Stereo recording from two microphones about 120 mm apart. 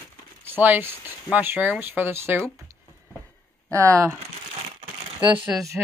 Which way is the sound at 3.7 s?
25° right (ahead or behind).